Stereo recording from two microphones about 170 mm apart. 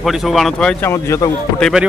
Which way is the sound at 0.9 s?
15° left (ahead or behind).